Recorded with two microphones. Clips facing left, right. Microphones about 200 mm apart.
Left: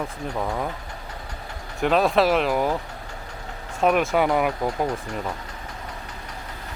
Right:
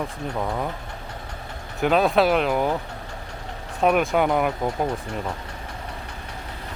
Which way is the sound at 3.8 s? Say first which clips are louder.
Even; centre (ahead or behind).